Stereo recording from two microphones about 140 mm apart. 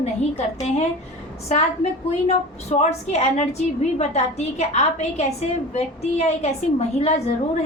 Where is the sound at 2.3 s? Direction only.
55° left (ahead or behind).